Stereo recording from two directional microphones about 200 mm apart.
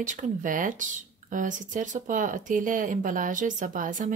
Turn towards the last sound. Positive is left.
turn(degrees=-40)  # may be behind; listen again after turning